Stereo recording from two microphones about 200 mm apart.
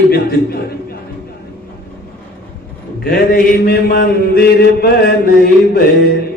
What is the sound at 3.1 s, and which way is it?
Mantra, 50° left (ahead or behind).